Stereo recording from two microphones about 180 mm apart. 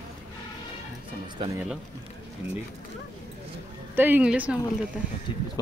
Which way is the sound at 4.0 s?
10° right (ahead or behind).